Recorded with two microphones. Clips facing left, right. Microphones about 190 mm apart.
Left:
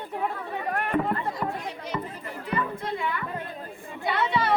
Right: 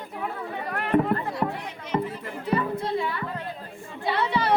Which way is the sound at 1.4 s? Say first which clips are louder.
Right 3 dB; 45° right (ahead or behind).